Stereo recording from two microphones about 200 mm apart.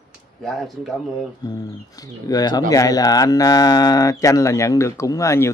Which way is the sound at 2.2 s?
20° left (ahead or behind).